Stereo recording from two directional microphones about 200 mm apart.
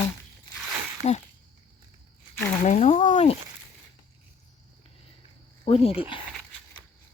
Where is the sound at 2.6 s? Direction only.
35° left (ahead or behind).